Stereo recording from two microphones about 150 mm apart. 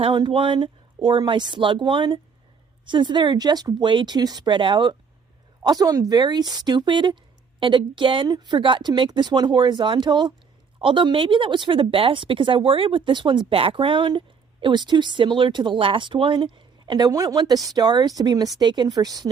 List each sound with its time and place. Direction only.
0.0 s a woman's voice: 30° right (ahead or behind)